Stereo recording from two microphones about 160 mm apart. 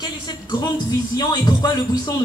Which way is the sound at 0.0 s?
30° left (ahead or behind).